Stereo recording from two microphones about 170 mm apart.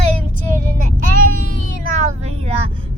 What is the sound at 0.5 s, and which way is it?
Speech, 55° right (ahead or behind).